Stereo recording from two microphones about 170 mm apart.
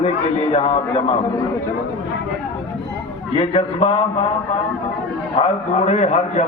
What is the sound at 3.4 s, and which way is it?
Speech, 35° left (ahead or behind).